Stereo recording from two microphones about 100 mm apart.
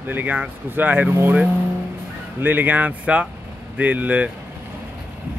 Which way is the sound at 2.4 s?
20° right (ahead or behind).